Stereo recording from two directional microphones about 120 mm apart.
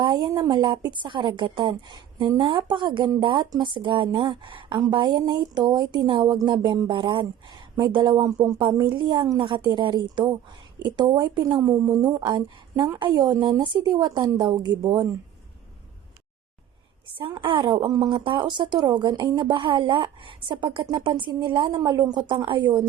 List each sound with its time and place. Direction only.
0.0 s a woman's voice: 40° right (ahead or behind)
17.2 s a woman's voice: 45° right (ahead or behind)